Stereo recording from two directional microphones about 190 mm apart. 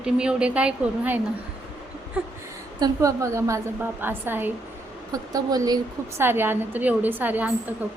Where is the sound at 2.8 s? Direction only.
15° right (ahead or behind).